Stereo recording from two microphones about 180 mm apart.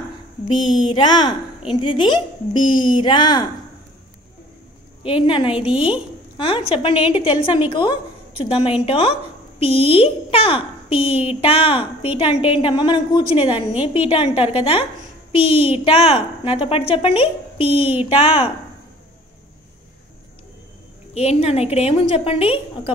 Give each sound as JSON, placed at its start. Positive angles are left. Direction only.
{"t": 0.8, "sound": "speech", "side_deg": 25}
{"t": 5.0, "sound": "a woman's voice", "side_deg": 30}
{"t": 21.1, "sound": "a woman's voice", "side_deg": 35}